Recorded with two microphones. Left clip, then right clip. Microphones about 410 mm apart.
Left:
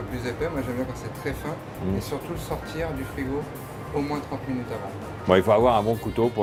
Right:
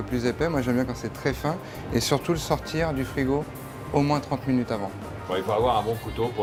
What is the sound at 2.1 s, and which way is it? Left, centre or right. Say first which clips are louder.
Speech: right 6 dB; right.